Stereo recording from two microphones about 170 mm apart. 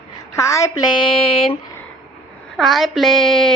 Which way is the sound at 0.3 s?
20° left (ahead or behind).